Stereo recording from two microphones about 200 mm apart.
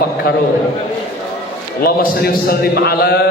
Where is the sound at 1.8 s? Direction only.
50° left (ahead or behind).